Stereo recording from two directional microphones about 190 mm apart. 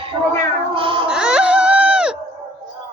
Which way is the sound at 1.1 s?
5° right (ahead or behind).